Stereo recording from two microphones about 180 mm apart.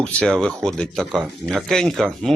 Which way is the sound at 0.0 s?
5° left (ahead or behind).